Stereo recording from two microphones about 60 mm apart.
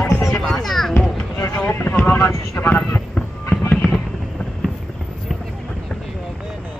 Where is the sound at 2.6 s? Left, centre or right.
Left.